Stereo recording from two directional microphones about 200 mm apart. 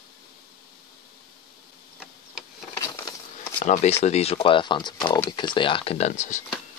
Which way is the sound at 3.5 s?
35° left (ahead or behind).